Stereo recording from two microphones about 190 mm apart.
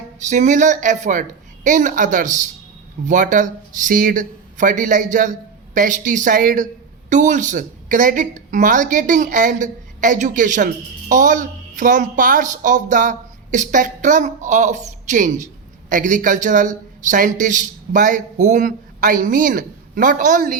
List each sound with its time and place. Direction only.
0.2 s a woman's voice: 40° right (ahead or behind)